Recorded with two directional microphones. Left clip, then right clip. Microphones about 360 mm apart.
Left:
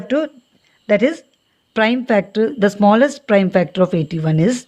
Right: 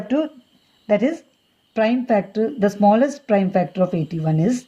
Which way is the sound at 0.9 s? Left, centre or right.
Left.